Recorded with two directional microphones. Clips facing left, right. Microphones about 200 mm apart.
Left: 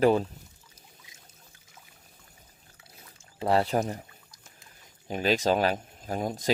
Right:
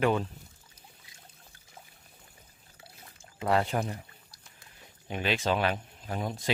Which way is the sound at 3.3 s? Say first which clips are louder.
Left 3 dB; 30° left (ahead or behind).